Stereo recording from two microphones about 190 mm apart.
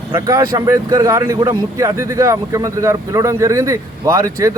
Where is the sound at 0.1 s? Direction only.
15° right (ahead or behind).